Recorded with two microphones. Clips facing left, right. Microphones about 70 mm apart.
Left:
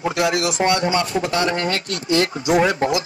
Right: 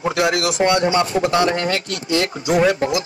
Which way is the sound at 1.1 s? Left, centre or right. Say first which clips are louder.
Right 3 dB; right.